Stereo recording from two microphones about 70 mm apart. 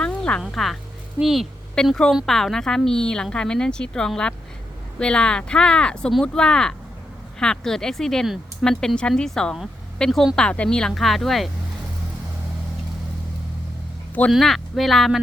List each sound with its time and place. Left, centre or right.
0.0 s music: centre
0.4 s speech: centre
1.8 s a woman's voice: centre
14.3 s speech: centre